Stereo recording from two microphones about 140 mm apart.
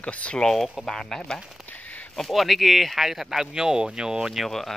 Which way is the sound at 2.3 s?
Centre (ahead or behind).